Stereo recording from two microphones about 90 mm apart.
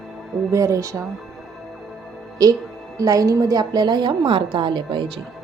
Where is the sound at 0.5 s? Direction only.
35° right (ahead or behind).